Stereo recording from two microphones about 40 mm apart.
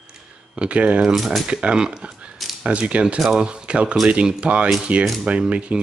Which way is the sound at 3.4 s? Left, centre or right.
Right.